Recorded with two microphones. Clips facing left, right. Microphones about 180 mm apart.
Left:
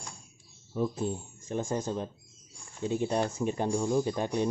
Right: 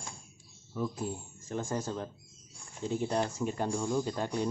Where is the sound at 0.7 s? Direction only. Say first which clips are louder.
Left 4 dB; 25° left (ahead or behind).